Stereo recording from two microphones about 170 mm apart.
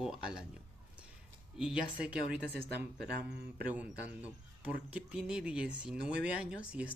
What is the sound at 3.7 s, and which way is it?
Speech, 10° right (ahead or behind).